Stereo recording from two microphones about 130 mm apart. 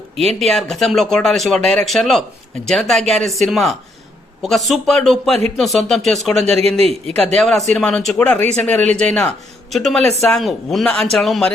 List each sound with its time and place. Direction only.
0.3 s speech: centre (ahead or behind)
6.6 s a man's voice: 50° right (ahead or behind)
7.3 s speech: centre (ahead or behind)